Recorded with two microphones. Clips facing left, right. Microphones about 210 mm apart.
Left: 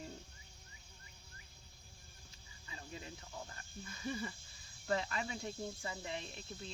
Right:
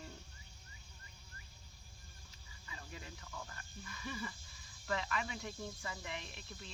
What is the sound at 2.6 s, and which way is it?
Snake, 30° left (ahead or behind).